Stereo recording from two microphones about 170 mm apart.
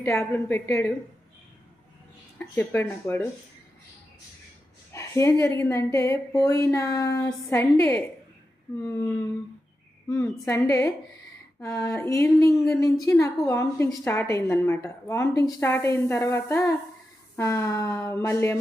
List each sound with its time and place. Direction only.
0.0 s a woman's voice: 15° left (ahead or behind)
2.4 s a woman's voice: 10° left (ahead or behind)
4.9 s a woman's voice: 15° left (ahead or behind)
12.5 s speech: centre (ahead or behind)
12.8 s a woman's voice: 15° left (ahead or behind)